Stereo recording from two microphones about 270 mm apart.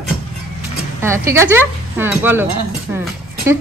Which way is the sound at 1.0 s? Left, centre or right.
Centre.